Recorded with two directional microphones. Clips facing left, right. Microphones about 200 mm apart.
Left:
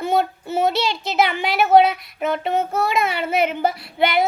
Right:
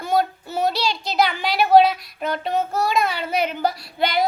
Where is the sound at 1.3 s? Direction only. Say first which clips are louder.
Even; 20° left (ahead or behind).